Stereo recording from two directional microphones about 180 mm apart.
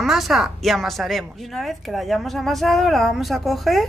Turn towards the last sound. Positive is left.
turn(degrees=0)  # may be behind; listen again after turning